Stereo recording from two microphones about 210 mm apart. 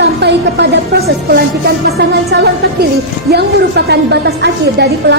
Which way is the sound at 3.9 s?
50° right (ahead or behind).